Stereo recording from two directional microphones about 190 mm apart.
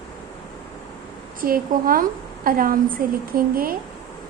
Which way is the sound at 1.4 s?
50° right (ahead or behind).